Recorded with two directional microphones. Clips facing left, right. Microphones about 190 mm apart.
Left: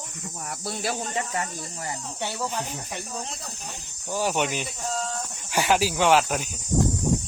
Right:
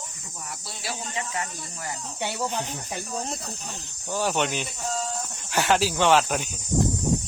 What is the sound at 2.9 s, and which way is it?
Speech, 40° right (ahead or behind).